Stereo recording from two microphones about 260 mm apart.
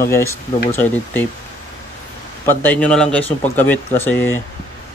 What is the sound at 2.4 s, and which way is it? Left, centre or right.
A man's voice, centre.